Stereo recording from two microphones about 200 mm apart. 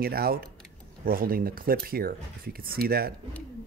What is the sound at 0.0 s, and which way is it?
Speech, 50° right (ahead or behind).